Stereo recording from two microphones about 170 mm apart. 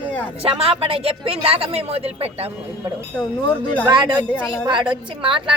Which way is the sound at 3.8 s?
25° right (ahead or behind).